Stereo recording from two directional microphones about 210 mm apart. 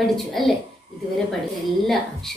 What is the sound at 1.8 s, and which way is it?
Speech, centre (ahead or behind).